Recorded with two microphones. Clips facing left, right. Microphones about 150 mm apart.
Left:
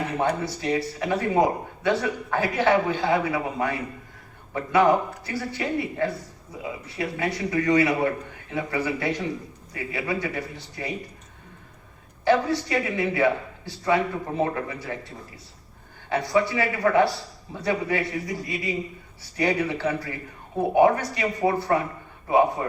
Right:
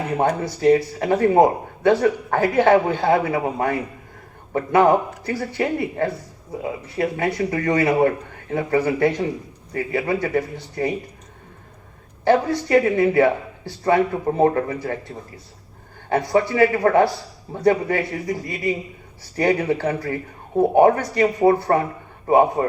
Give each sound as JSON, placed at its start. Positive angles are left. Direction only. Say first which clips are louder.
{"t": 0.2, "sound": "a man's voice", "louder": "right 6 dB", "side_deg": -45}
{"t": 12.2, "sound": "a man's voice", "louder": "right 3 dB", "side_deg": -50}
{"t": 16.0, "sound": "a man's voice", "louder": "right 4 dB", "side_deg": -45}